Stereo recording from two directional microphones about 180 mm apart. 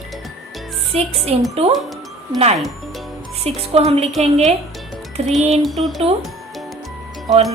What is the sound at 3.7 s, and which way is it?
Speech, 35° right (ahead or behind).